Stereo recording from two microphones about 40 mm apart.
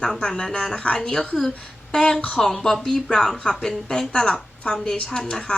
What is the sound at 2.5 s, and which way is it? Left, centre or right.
A woman's voice, centre.